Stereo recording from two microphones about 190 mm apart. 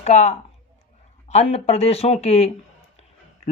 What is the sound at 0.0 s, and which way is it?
Speech, 35° left (ahead or behind).